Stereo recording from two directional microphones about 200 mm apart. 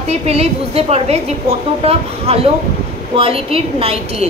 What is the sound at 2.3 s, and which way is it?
A woman's voice, 30° right (ahead or behind).